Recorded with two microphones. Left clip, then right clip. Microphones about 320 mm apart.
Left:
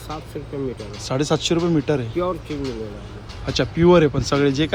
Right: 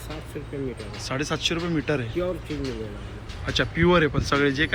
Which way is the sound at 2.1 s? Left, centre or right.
Left.